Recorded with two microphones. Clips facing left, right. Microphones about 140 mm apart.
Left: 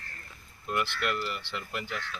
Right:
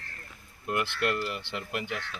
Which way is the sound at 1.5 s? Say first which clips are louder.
Right 2 dB; 60° right (ahead or behind).